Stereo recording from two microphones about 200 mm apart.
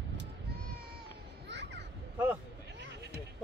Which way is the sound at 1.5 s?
60° right (ahead or behind).